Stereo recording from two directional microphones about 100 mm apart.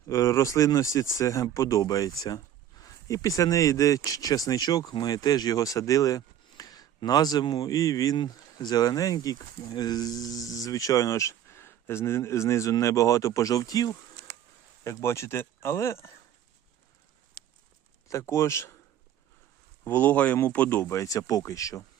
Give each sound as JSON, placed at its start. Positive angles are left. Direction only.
{"t": 0.1, "sound": "speech", "side_deg": 30}
{"t": 14.8, "sound": "speech", "side_deg": 25}
{"t": 18.1, "sound": "speech", "side_deg": 30}
{"t": 19.8, "sound": "speech", "side_deg": 20}
{"t": 21.0, "sound": "speech", "side_deg": 35}